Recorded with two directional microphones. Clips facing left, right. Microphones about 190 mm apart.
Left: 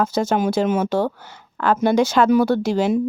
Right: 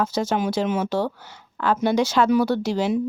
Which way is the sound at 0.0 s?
50° left (ahead or behind).